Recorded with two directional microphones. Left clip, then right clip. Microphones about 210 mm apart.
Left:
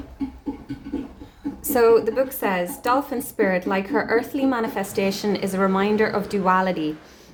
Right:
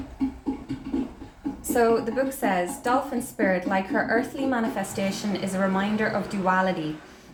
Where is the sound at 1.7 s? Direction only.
45° left (ahead or behind).